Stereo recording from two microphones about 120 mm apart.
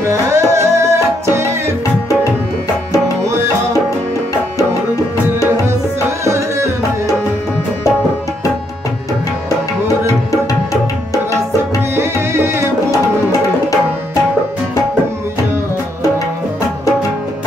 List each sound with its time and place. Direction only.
0.1 s music: 25° right (ahead or behind)
6.2 s tabla: 25° right (ahead or behind)
11.9 s music: 20° right (ahead or behind)